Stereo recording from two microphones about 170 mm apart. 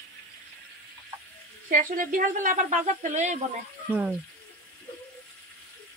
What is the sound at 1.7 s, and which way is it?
Speech, 55° right (ahead or behind).